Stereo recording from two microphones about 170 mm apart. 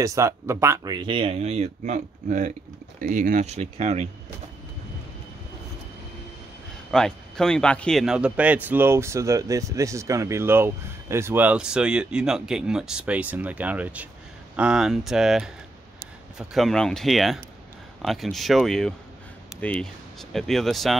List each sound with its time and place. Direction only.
0.0 s a man's voice: 20° right (ahead or behind)
0.9 s speech: 30° right (ahead or behind)
6.9 s a man's voice: 5° left (ahead or behind)